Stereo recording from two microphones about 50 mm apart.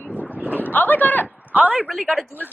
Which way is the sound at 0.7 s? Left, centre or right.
Left.